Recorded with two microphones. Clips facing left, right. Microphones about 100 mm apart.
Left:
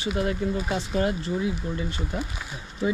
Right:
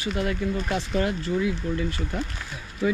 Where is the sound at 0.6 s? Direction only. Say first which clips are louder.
Right 1 dB; 10° left (ahead or behind).